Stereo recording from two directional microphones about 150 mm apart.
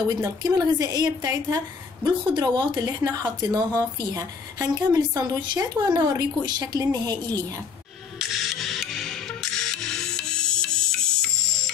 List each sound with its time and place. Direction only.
0.1 s speech: 25° right (ahead or behind)
8.2 s music: centre (ahead or behind)